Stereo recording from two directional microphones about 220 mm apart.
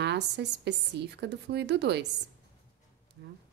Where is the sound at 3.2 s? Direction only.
50° right (ahead or behind).